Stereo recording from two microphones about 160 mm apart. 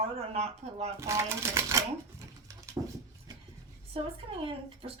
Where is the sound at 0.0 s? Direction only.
40° right (ahead or behind).